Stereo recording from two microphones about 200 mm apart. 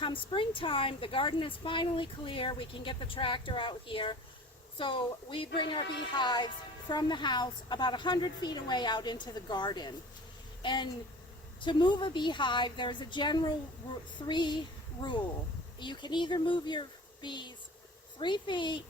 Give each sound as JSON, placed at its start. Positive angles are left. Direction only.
{"t": 0.0, "sound": "a woman's voice", "side_deg": 25}
{"t": 15.8, "sound": "a woman's voice", "side_deg": 25}